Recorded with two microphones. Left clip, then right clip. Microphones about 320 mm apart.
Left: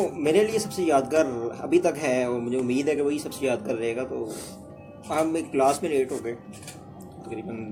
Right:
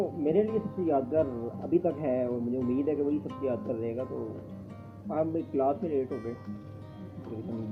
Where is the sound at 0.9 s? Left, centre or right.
Left.